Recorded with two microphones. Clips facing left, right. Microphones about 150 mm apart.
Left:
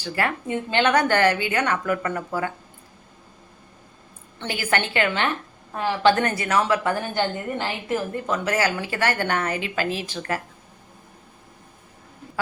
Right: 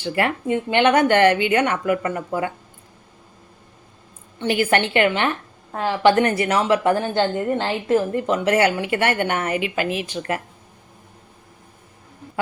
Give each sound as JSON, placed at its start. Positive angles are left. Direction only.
{"t": 0.0, "sound": "a woman's voice", "side_deg": -20}
{"t": 4.4, "sound": "a woman's voice", "side_deg": -25}